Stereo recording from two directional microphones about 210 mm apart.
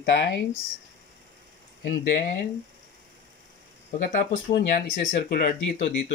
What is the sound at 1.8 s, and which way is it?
Speech, 50° left (ahead or behind).